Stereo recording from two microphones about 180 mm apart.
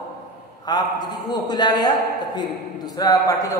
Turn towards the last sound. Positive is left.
turn(degrees=20)  # may be behind; listen again after turning